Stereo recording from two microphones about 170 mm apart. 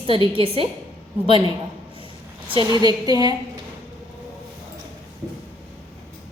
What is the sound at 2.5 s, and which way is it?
Speech, 25° right (ahead or behind).